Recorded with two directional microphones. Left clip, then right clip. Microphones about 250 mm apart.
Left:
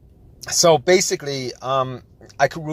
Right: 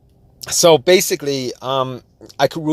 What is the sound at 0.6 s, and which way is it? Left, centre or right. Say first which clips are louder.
Speech: right 3 dB; right.